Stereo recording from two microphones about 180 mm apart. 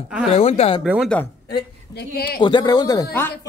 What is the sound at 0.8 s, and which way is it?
Speech, 5° right (ahead or behind).